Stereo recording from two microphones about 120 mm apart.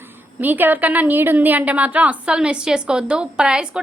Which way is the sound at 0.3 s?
15° right (ahead or behind).